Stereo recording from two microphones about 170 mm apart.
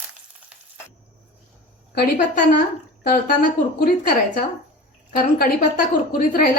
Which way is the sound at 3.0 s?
55° left (ahead or behind).